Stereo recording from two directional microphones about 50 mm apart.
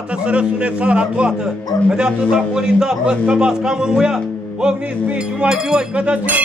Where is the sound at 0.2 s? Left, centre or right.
Right.